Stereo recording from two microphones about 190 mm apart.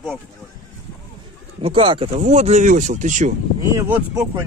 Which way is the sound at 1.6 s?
30° right (ahead or behind).